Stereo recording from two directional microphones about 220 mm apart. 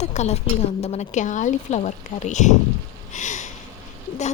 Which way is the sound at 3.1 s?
35° left (ahead or behind).